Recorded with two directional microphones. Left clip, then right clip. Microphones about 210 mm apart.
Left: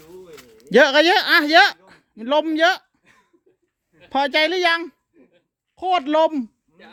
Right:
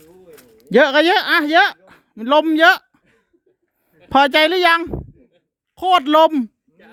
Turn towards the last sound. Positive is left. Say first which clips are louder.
# right 5 dB
turn(degrees=-30)  # may be behind; listen again after turning